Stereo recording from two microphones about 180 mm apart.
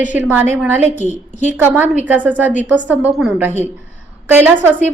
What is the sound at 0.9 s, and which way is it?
Speech, 40° left (ahead or behind).